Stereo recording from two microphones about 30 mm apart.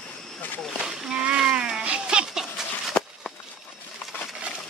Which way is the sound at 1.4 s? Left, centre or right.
Right.